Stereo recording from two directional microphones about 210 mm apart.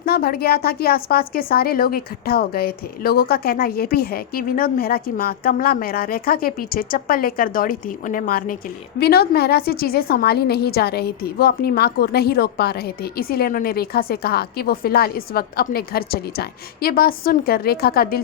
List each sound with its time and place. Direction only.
0.0 s a woman's voice: 45° left (ahead or behind)